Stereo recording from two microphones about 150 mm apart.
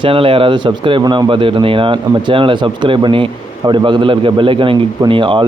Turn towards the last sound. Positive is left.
turn(degrees=-35)  # may be behind; listen again after turning